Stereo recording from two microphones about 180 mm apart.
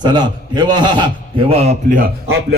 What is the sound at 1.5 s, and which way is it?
Speech, 35° right (ahead or behind).